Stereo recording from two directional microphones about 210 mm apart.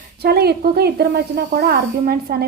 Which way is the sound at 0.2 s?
50° right (ahead or behind).